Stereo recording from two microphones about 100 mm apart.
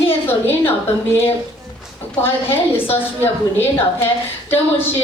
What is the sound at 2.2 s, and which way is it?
A woman's voice, 20° left (ahead or behind).